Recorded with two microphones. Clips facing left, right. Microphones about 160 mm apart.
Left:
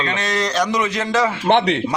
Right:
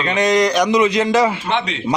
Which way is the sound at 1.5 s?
60° left (ahead or behind).